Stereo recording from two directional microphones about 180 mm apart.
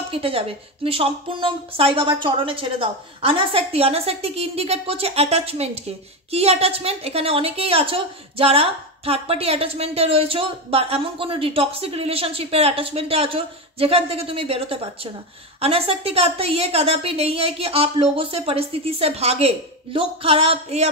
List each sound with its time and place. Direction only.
0.1 s a woman's voice: 30° right (ahead or behind)